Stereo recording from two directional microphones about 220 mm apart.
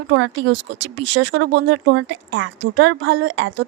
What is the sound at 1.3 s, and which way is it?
A woman's voice, 55° right (ahead or behind).